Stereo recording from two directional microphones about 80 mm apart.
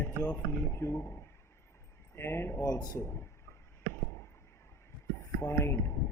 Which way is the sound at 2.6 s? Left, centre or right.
Left.